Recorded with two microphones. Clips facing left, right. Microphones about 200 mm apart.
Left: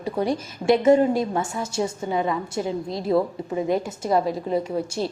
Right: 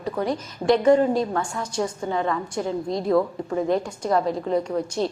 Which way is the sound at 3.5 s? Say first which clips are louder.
Right 1 dB; 5° left (ahead or behind).